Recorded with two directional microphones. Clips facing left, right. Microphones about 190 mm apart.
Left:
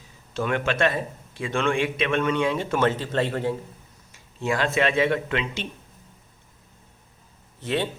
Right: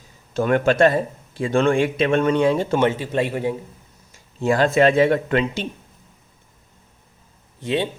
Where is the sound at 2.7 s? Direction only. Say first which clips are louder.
Right 3 dB; 15° right (ahead or behind).